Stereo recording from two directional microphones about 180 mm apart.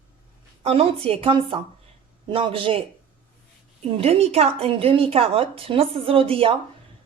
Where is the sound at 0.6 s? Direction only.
35° right (ahead or behind).